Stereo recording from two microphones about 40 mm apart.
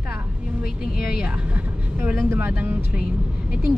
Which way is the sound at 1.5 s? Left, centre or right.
Right.